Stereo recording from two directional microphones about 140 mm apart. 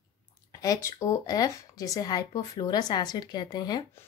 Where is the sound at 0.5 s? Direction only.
25° left (ahead or behind).